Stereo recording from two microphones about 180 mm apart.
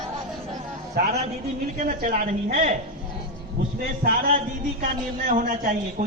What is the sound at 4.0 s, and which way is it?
A man's voice, 55° right (ahead or behind).